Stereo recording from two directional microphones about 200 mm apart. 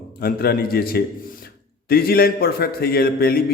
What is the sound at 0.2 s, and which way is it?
A man's voice, 50° left (ahead or behind).